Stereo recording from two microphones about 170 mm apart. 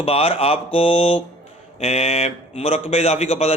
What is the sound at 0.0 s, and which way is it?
A man's voice, 35° left (ahead or behind).